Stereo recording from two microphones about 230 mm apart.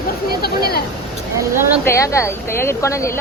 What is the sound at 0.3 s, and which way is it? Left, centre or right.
Speech, left.